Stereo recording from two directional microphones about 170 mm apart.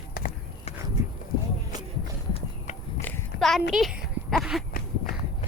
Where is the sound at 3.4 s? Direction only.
Centre (ahead or behind).